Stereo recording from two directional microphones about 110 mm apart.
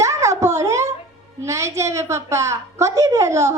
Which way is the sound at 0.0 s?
30° right (ahead or behind).